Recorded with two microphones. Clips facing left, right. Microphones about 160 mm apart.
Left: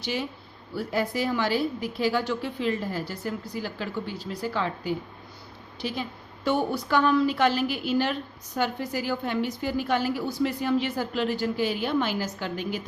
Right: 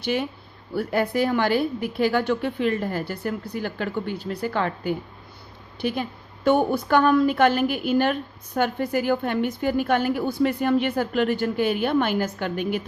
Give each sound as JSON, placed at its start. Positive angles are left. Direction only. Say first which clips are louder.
{"t": 0.0, "sound": "a woman's voice", "louder": "right 5 dB", "side_deg": -55}